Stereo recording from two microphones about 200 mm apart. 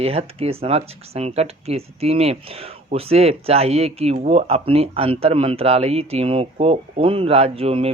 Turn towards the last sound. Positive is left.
turn(degrees=-30)  # may be behind; listen again after turning